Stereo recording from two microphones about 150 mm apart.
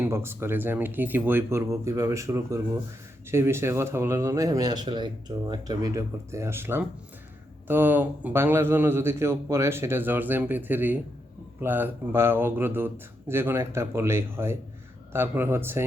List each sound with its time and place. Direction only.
0.0 s a man's voice: 15° right (ahead or behind)